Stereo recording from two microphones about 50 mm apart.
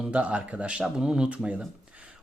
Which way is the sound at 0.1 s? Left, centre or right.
Right.